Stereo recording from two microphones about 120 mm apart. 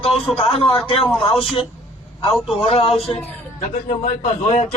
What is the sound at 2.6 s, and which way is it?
Speech, 55° left (ahead or behind).